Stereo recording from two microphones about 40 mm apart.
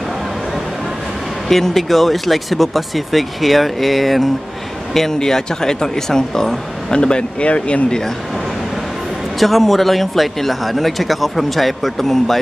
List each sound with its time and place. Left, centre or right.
1.5 s speech: centre
6.9 s speech: left
9.4 s speech: centre